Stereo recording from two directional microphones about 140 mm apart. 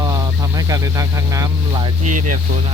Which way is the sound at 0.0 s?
25° right (ahead or behind).